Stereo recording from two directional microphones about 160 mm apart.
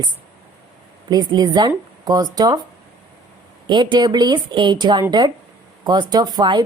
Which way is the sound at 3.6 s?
30° right (ahead or behind).